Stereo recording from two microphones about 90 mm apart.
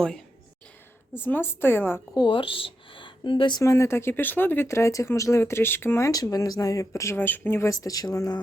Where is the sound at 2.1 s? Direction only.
55° left (ahead or behind).